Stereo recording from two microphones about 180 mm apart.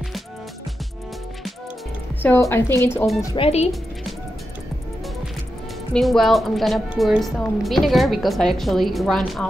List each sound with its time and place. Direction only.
2.2 s a woman's voice: 15° left (ahead or behind)
3.3 s speech: 35° left (ahead or behind)
5.9 s a woman's voice: centre (ahead or behind)